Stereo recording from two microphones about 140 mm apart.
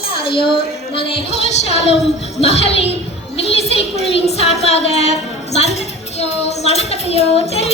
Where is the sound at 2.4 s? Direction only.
45° left (ahead or behind).